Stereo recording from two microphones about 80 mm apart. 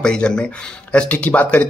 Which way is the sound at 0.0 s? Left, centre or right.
Centre.